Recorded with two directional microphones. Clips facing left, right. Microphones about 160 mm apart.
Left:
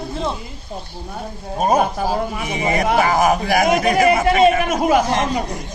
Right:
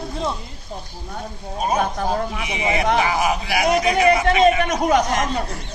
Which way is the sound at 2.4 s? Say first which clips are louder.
Left 2 dB; 45° left (ahead or behind).